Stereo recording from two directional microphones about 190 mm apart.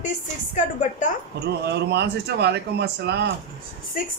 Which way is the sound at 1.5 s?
60° right (ahead or behind).